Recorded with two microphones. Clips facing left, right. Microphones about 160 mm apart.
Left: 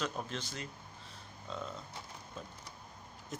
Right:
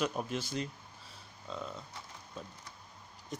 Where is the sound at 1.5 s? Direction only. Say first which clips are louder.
Right 1 dB; centre (ahead or behind).